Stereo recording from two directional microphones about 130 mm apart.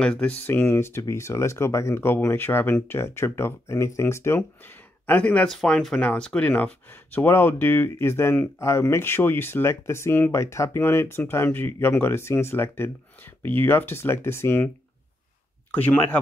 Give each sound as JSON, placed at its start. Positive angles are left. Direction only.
{"t": 0.0, "sound": "speech", "side_deg": 10}
{"t": 5.0, "sound": "speech", "side_deg": 10}
{"t": 15.7, "sound": "speech", "side_deg": 10}